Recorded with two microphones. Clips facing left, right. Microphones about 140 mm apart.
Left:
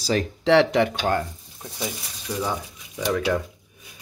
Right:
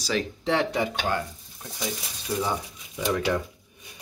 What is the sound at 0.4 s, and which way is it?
Speech, 90° left.